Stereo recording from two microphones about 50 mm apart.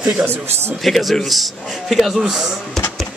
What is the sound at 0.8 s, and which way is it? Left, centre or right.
A man's voice, centre.